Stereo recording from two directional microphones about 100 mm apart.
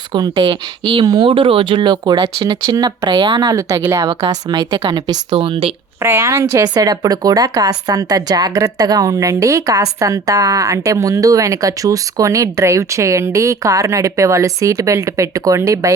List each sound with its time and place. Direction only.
0.1 s speech: 55° right (ahead or behind)
1.0 s speech: 40° right (ahead or behind)
1.3 s speech: 65° right (ahead or behind); by 2.9 s 40° right (ahead or behind)
3.0 s speech: 50° right (ahead or behind)
3.5 s speech: 35° right (ahead or behind)
5.3 s speech: 70° right (ahead or behind)
6.0 s speech: 25° right (ahead or behind)